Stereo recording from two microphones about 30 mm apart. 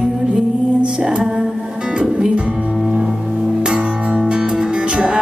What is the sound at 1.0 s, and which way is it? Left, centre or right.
Music, right.